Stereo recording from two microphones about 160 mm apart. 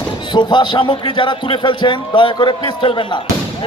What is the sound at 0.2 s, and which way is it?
A man's voice, 30° left (ahead or behind).